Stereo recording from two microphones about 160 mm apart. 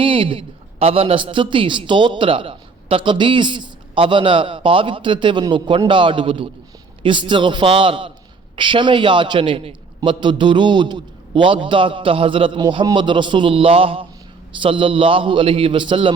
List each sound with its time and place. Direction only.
0.0 s a man's voice: 35° right (ahead or behind)